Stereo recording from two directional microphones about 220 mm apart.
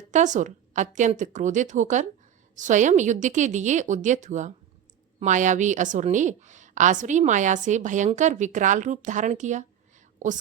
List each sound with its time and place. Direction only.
0.1 s a woman's voice: 35° right (ahead or behind)